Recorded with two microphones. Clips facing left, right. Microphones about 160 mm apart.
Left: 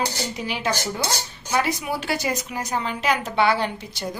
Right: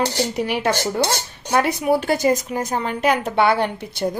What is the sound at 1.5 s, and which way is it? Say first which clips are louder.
A woman's voice: right 6 dB; 60° right (ahead or behind).